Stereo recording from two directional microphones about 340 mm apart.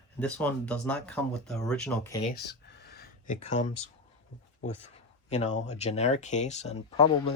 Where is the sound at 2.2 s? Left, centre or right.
Left.